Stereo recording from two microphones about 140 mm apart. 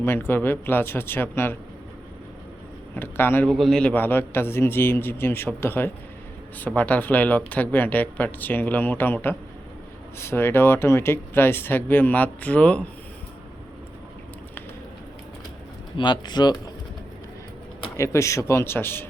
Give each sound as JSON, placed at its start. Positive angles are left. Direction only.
{"t": 0.0, "sound": "speech", "side_deg": 15}
{"t": 2.9, "sound": "speech", "side_deg": 15}
{"t": 3.4, "sound": "speech", "side_deg": 0}
{"t": 16.0, "sound": "speech", "side_deg": 30}
{"t": 17.9, "sound": "speech", "side_deg": 20}